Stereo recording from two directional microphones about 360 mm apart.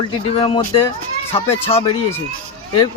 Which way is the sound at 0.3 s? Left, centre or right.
Centre.